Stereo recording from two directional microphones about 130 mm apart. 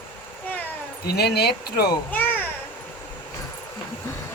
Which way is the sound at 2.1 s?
15° left (ahead or behind).